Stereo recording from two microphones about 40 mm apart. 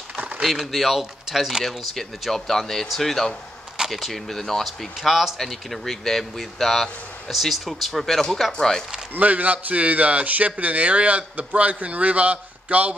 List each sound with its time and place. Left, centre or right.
0.7 s speech: centre
4.9 s speech: centre
9.1 s speech: right